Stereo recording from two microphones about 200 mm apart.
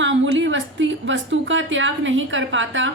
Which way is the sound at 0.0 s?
65° right (ahead or behind).